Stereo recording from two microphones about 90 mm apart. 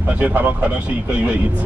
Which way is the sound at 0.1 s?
20° right (ahead or behind).